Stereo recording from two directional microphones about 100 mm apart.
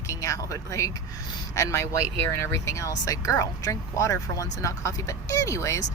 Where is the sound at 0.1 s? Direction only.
30° left (ahead or behind).